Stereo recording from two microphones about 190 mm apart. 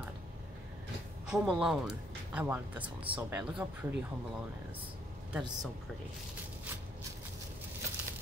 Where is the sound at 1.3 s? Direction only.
5° right (ahead or behind).